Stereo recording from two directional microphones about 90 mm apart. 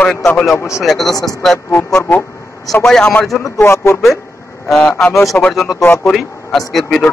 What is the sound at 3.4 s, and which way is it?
Speech, 30° left (ahead or behind).